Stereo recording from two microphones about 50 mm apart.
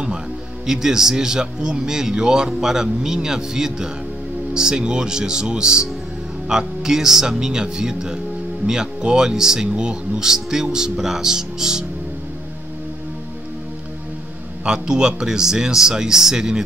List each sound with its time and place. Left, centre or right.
0.7 s speech: centre
14.6 s speech: centre